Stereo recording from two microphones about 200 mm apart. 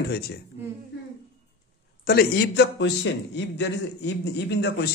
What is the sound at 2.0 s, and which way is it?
A man's voice, 50° left (ahead or behind).